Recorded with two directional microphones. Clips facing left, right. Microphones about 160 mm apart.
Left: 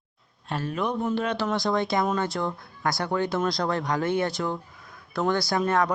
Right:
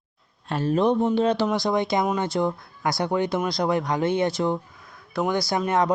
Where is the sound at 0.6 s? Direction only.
30° right (ahead or behind).